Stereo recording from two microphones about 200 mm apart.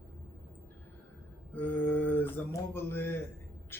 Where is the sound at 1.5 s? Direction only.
10° left (ahead or behind).